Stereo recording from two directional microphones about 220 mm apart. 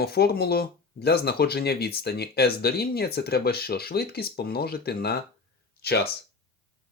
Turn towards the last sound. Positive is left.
turn(degrees=45)  # may be behind; listen again after turning